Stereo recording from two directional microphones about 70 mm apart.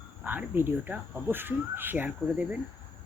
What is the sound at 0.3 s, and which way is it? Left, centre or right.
Speech, right.